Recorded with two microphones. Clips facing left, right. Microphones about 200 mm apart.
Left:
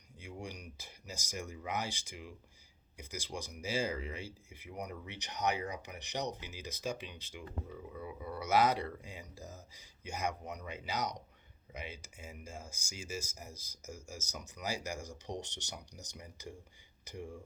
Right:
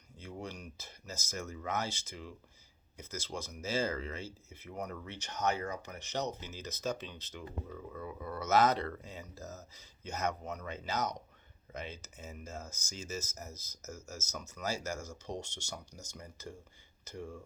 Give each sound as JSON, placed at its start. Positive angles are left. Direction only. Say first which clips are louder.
{"t": 0.2, "sound": "speech", "louder": "right 2 dB", "side_deg": 15}